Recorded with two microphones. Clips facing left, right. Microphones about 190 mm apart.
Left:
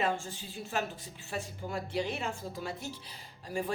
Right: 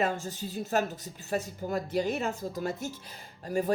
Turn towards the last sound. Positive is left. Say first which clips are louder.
# right 6 dB
turn(degrees=-45)  # may be behind; listen again after turning